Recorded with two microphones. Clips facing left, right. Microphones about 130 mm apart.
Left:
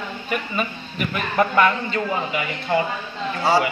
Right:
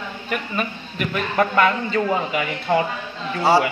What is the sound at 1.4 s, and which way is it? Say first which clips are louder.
Speech: even; centre (ahead or behind).